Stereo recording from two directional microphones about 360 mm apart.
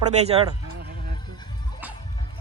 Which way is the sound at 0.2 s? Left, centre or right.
Centre.